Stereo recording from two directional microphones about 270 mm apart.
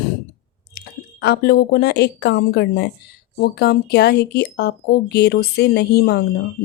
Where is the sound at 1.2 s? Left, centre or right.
Left.